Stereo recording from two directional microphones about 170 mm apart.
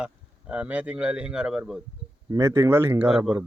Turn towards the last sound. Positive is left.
turn(degrees=-5)  # may be behind; listen again after turning